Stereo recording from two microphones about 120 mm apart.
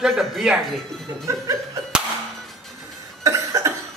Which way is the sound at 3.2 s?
25° right (ahead or behind).